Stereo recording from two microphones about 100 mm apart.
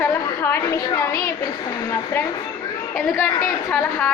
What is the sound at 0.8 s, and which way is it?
Speech, 45° left (ahead or behind).